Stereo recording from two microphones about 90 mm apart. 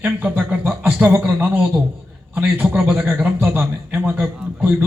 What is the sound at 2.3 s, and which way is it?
A man's voice, 20° right (ahead or behind).